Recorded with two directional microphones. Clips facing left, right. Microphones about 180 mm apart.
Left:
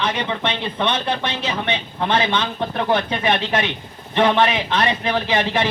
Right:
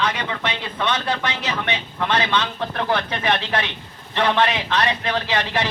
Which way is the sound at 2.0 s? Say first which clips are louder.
Left 1 dB; 20° left (ahead or behind).